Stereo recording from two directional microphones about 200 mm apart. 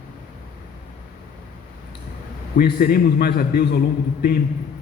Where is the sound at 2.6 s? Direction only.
50° left (ahead or behind).